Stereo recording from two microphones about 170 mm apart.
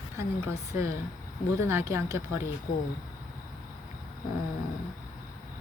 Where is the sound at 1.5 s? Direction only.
15° right (ahead or behind).